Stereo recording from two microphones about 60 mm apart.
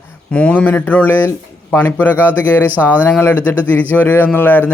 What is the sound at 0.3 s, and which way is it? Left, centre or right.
Speech, left.